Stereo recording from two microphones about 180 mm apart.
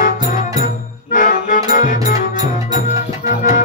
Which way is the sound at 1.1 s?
45° left (ahead or behind).